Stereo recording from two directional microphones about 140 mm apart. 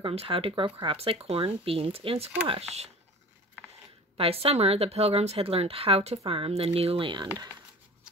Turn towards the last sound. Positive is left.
turn(degrees=-35)  # may be behind; listen again after turning